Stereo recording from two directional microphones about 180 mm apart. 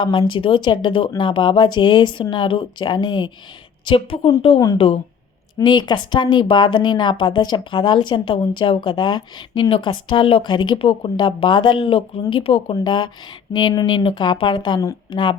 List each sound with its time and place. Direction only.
0.0 s a woman's voice: 25° left (ahead or behind)